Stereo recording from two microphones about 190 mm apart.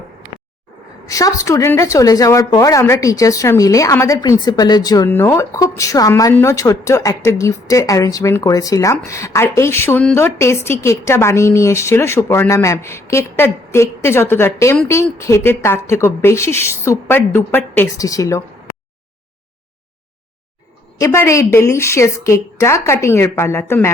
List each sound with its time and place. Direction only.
1.0 s a woman's voice: 15° left (ahead or behind)
21.0 s a woman's voice: 15° left (ahead or behind)